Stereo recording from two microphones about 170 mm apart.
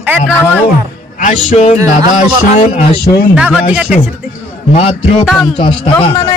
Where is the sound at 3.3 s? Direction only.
5° right (ahead or behind).